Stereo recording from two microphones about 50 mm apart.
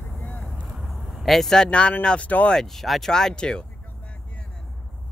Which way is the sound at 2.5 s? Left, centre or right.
Centre.